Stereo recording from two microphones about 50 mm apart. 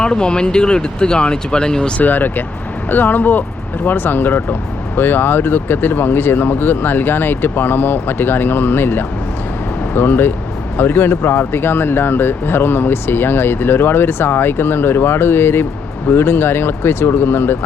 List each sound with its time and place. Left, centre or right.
0.0 s speech: centre
2.0 s speech: left